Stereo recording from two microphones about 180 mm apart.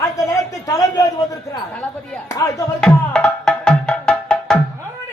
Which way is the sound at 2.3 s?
15° left (ahead or behind).